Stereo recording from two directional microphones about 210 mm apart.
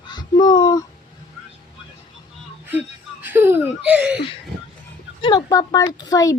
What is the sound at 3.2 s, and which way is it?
Laughter, 10° right (ahead or behind).